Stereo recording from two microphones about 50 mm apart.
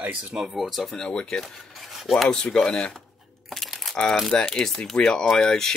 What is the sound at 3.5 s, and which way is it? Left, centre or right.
Crumpling, centre.